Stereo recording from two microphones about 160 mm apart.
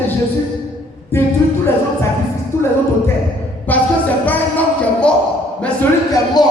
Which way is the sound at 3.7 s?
10° left (ahead or behind).